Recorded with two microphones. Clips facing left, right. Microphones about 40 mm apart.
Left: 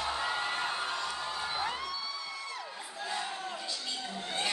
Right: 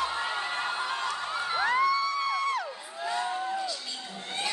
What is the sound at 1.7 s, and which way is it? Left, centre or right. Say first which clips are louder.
Music: right 12 dB; right.